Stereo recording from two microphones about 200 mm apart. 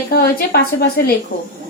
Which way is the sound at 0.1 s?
55° left (ahead or behind).